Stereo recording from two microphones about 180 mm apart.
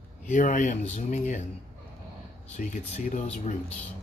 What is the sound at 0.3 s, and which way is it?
Speech, 45° left (ahead or behind).